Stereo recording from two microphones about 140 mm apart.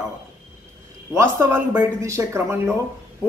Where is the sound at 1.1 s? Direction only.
20° right (ahead or behind).